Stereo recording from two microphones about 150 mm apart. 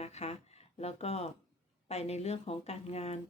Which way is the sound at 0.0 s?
45° left (ahead or behind).